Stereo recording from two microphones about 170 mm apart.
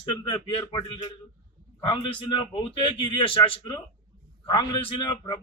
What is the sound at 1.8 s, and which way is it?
A man's voice, 30° left (ahead or behind).